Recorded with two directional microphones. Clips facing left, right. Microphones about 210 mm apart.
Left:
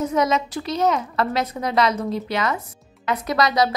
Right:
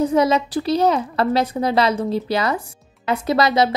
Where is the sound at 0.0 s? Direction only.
30° right (ahead or behind).